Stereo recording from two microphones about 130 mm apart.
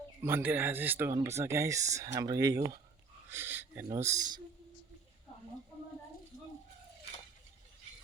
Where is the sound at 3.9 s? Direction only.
25° right (ahead or behind).